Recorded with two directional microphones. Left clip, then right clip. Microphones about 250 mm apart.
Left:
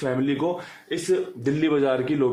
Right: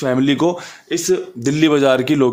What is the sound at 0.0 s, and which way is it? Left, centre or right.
A man's voice, right.